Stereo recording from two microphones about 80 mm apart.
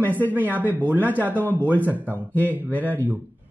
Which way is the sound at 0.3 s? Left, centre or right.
Right.